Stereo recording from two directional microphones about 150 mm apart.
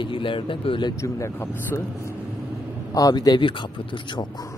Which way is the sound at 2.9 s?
25° left (ahead or behind).